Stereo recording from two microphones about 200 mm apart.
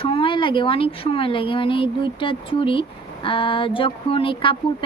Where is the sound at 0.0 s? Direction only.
25° left (ahead or behind).